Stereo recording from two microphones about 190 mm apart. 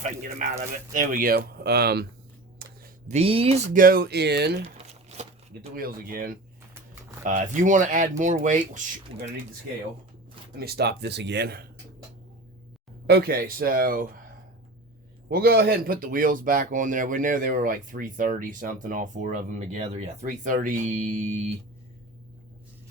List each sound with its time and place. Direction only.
0.0 s speech: 40° right (ahead or behind); by 2.0 s 55° right (ahead or behind)
2.6 s a sound: 55° right (ahead or behind)
3.1 s speech: 30° right (ahead or behind)
3.7 s speech: 45° right (ahead or behind)
5.7 s speech: 50° right (ahead or behind)
10.6 s speech: 55° right (ahead or behind)
13.1 s speech: 55° right (ahead or behind)
15.3 s speech: 55° right (ahead or behind)